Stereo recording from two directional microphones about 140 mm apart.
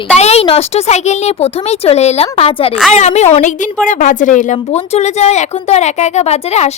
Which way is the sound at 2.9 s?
55° left (ahead or behind).